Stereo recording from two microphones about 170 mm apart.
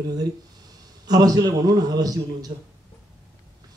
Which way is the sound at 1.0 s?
20° right (ahead or behind).